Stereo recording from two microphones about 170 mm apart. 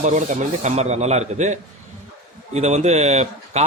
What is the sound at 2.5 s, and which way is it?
Rub, 40° right (ahead or behind).